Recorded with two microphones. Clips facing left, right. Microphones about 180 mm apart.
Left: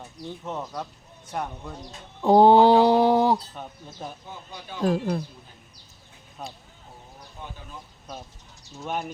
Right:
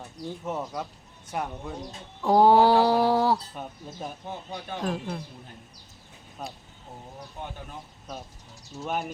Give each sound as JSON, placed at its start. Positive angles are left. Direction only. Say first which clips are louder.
{"t": 0.4, "sound": "speech", "louder": "right 1 dB", "side_deg": -5}
{"t": 2.2, "sound": "a sound", "louder": "left 3 dB", "side_deg": 25}
{"t": 4.8, "sound": "speech", "louder": "left 8 dB", "side_deg": 35}
{"t": 6.4, "sound": "speech", "louder": "even", "side_deg": 0}
{"t": 8.8, "sound": "speech", "louder": "even", "side_deg": 0}